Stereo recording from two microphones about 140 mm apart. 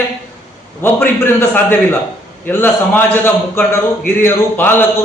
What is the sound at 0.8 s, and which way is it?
A man's voice, 15° left (ahead or behind).